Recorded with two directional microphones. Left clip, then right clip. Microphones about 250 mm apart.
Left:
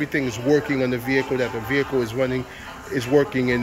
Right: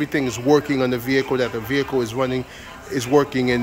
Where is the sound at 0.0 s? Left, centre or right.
Centre.